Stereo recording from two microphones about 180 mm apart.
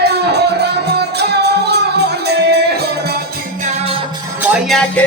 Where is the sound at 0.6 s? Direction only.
65° right (ahead or behind).